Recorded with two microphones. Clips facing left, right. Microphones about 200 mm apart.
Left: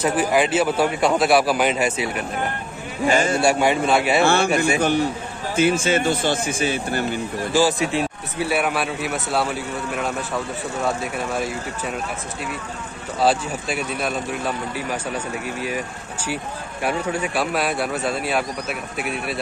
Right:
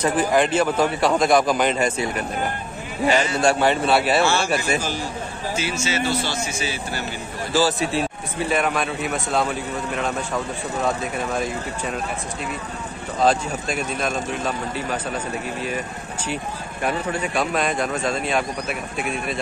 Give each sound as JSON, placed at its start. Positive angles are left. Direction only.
{"t": 0.0, "sound": "speech", "side_deg": 5}
{"t": 3.1, "sound": "a man's voice", "side_deg": 50}
{"t": 3.3, "sound": "speech", "side_deg": 10}
{"t": 4.2, "sound": "a man's voice", "side_deg": 55}
{"t": 7.5, "sound": "speech", "side_deg": 15}
{"t": 11.3, "sound": "speech", "side_deg": 5}
{"t": 13.2, "sound": "speech", "side_deg": 5}
{"t": 16.8, "sound": "speech", "side_deg": 10}